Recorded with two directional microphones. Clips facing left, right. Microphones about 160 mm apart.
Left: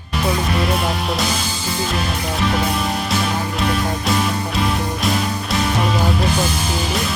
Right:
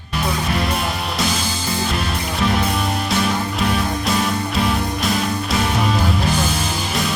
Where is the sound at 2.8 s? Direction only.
Centre (ahead or behind).